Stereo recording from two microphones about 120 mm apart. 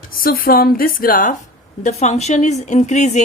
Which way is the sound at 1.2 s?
90° left.